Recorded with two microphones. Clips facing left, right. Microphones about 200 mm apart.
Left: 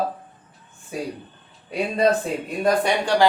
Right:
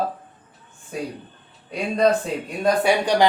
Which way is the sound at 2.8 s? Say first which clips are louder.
Right 2 dB; 15° right (ahead or behind).